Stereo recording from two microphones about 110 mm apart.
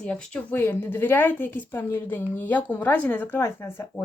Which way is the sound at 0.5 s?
20° left (ahead or behind).